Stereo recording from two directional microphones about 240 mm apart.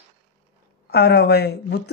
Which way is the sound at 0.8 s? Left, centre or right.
Left.